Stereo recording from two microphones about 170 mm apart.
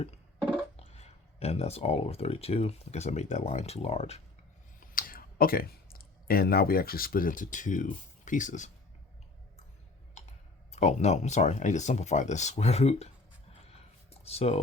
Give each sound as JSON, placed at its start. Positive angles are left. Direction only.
{"t": 0.8, "sound": "speech", "side_deg": 40}
{"t": 4.8, "sound": "speech", "side_deg": 55}
{"t": 10.7, "sound": "speech", "side_deg": 40}
{"t": 14.1, "sound": "a sound", "side_deg": 35}